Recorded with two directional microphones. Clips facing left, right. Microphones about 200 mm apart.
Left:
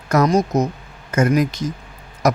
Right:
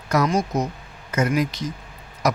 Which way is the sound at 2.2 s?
50° left (ahead or behind).